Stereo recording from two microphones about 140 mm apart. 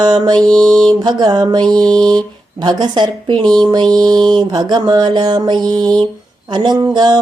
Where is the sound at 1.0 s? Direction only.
30° right (ahead or behind).